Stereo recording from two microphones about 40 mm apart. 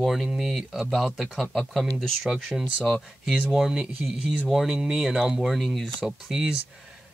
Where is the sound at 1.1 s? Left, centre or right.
Centre.